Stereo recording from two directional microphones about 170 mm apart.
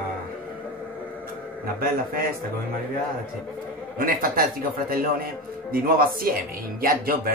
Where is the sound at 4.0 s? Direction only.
55° right (ahead or behind).